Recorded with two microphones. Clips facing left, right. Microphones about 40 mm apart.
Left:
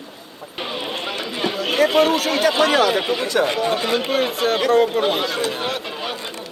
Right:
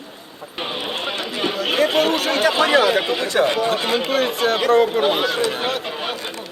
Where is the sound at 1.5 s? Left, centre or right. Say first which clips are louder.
Left 1 dB; centre.